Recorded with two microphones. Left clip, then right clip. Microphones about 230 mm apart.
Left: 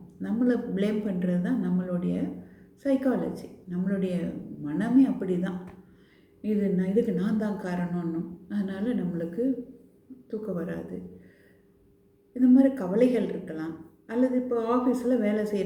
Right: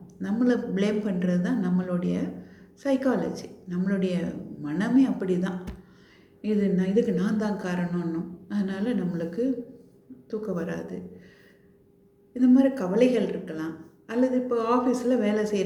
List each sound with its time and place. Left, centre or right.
0.2 s a woman's voice: centre
7.4 s speech: right
8.5 s a woman's voice: centre
12.3 s a woman's voice: centre